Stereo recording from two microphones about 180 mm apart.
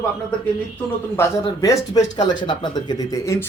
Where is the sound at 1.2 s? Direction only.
20° left (ahead or behind).